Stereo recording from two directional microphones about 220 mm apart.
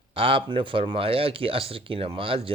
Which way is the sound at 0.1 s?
25° right (ahead or behind).